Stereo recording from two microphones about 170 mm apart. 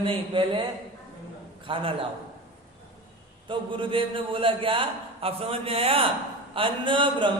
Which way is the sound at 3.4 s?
30° right (ahead or behind).